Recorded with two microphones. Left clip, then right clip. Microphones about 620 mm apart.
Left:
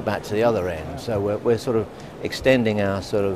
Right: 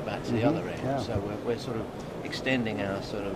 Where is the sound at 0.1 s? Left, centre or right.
Left.